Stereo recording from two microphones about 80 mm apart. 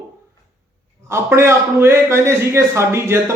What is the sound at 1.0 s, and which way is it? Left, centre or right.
Speech, right.